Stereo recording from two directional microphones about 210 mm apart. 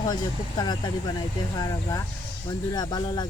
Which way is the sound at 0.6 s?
20° left (ahead or behind).